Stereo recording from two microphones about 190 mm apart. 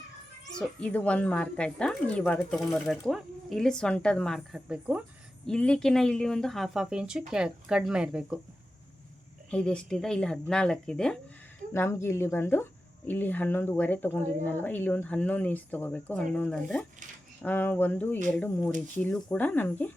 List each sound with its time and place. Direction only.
0.5 s speech: 5° left (ahead or behind)
5.5 s speech: 5° left (ahead or behind)
9.5 s speech: 5° left (ahead or behind)